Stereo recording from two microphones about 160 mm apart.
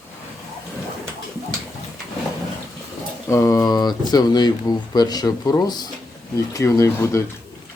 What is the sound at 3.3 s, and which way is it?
Speech, 20° left (ahead or behind).